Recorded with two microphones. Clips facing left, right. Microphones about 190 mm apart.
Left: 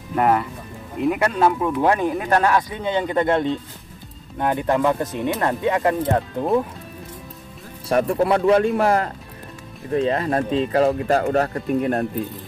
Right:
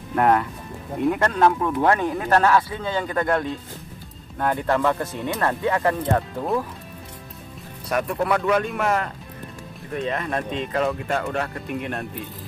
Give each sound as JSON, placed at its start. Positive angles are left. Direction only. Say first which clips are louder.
{"t": 0.1, "sound": "speech", "louder": "even", "side_deg": 5}
{"t": 7.9, "sound": "speech", "louder": "left 5 dB", "side_deg": 30}